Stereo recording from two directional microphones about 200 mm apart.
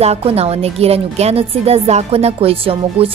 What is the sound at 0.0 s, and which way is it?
A woman's voice, 30° right (ahead or behind).